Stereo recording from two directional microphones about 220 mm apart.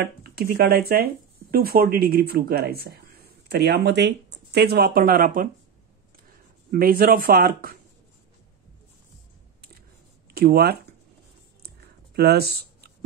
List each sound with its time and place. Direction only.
0.0 s speech: 45° right (ahead or behind)
6.7 s speech: 40° right (ahead or behind)
10.3 s speech: 45° right (ahead or behind)
11.6 s a sound: 45° right (ahead or behind)